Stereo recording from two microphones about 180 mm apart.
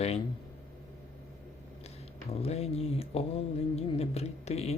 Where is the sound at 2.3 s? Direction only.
35° left (ahead or behind).